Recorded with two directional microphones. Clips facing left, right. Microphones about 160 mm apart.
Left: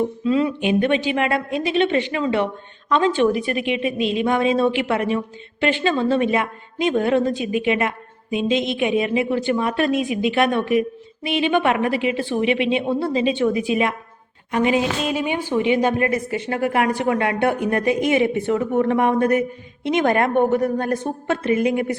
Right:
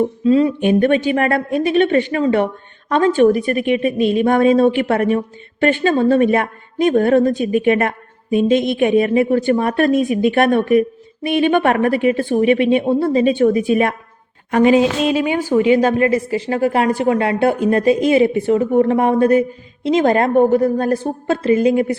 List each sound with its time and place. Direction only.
0.0 s a woman's voice: 40° right (ahead or behind)
16.0 s a woman's voice: 30° right (ahead or behind)